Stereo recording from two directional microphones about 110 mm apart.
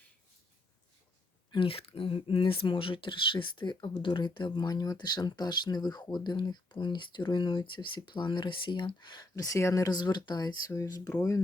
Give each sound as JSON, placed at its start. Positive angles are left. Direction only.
{"t": 1.5, "sound": "speech", "side_deg": 55}
{"t": 9.3, "sound": "speech", "side_deg": 30}